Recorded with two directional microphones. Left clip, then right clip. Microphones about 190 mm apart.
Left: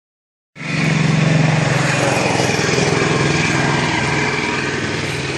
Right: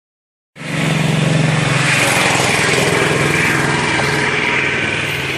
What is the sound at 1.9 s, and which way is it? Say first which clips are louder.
Vehicle: right 5 dB; 40° left (ahead or behind).